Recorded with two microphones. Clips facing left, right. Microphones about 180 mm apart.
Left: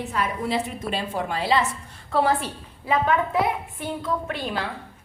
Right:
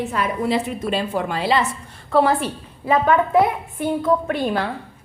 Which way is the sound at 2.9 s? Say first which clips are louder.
Right 5 dB; 50° right (ahead or behind).